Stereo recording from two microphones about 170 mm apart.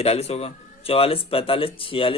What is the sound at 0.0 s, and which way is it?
A man's voice, 35° left (ahead or behind).